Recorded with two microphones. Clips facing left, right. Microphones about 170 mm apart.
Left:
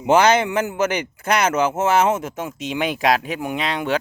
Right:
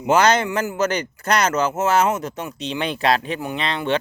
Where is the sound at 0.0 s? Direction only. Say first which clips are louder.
Left 1 dB; 10° left (ahead or behind).